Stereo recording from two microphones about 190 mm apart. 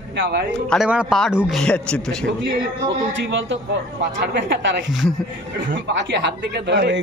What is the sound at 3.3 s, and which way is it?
A man's voice, 75° right (ahead or behind).